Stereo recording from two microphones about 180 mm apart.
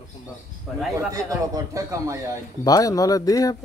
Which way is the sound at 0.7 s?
5° right (ahead or behind).